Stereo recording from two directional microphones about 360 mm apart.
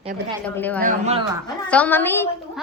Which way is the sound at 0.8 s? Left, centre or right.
Centre.